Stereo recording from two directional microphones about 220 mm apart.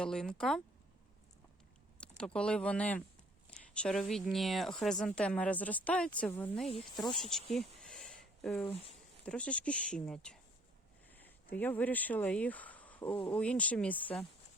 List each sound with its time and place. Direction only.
0.0 s speech: 5° left (ahead or behind)
2.0 s speech: 5° left (ahead or behind)
7.5 s a sound: centre (ahead or behind)
9.2 s speech: 5° left (ahead or behind)
11.5 s speech: 10° left (ahead or behind)
13.1 s speech: 25° left (ahead or behind)
13.3 s speech: 5° left (ahead or behind)